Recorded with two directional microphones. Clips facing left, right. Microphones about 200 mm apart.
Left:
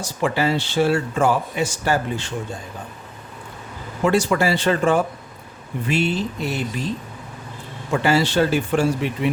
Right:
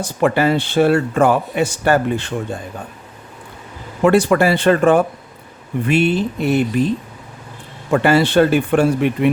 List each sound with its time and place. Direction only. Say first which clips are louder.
0.0 s a man's voice: right 5 dB; 55° right (ahead or behind)
4.0 s a man's voice: right 5 dB; 60° right (ahead or behind)
7.9 s a man's voice: right 5 dB; 60° right (ahead or behind)